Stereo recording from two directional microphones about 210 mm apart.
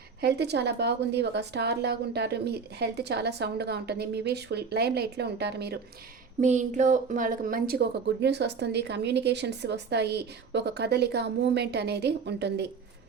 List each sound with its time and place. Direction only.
0.2 s speech: 50° right (ahead or behind)
6.4 s speech: 35° right (ahead or behind); by 12.6 s 55° right (ahead or behind)